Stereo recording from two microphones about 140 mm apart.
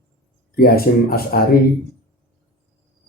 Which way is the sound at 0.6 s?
90° left.